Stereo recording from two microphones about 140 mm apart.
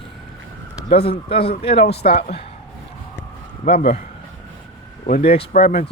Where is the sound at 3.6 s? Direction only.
90° left.